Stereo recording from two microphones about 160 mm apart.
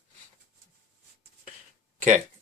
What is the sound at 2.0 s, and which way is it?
Speech, 50° right (ahead or behind).